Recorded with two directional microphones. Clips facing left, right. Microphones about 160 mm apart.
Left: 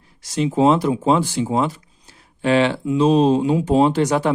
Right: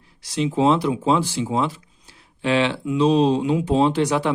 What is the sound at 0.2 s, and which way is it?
Speech, 45° left (ahead or behind).